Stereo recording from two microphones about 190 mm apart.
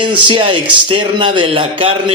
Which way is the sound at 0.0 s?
25° right (ahead or behind).